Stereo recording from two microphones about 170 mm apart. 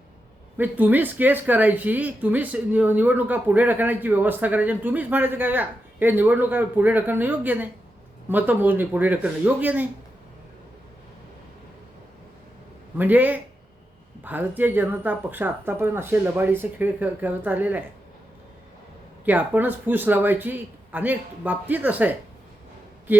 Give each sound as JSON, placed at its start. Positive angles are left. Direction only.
{"t": 0.5, "sound": "speech", "side_deg": -10}
{"t": 13.0, "sound": "speech", "side_deg": -10}
{"t": 19.2, "sound": "speech", "side_deg": -10}